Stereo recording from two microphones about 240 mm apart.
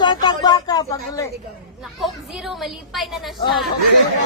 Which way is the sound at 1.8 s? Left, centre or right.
Centre.